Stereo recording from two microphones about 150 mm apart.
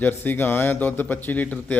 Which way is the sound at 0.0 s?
15° left (ahead or behind).